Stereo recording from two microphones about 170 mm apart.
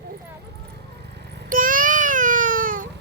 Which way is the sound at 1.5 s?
55° right (ahead or behind).